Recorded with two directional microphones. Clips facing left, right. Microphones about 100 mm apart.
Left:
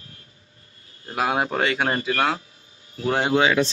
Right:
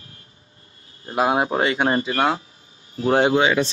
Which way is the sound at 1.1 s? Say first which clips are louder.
Right 3 dB; 25° right (ahead or behind).